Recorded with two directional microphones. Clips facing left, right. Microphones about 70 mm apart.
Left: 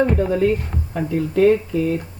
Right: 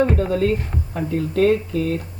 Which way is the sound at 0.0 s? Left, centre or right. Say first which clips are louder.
Left 1 dB; centre.